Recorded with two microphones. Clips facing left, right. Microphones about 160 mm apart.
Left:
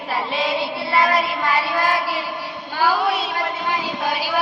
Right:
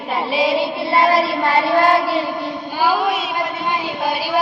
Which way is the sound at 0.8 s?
25° right (ahead or behind).